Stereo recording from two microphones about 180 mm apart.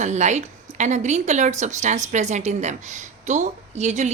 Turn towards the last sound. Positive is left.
turn(degrees=-40)  # may be behind; listen again after turning